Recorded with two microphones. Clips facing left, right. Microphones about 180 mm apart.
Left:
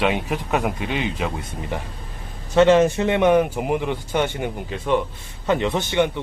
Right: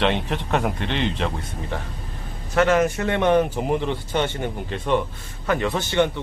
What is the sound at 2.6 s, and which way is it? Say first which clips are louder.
A man's voice: left 4 dB; 25° left (ahead or behind).